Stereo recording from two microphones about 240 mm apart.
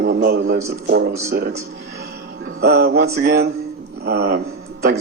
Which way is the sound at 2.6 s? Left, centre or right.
Right.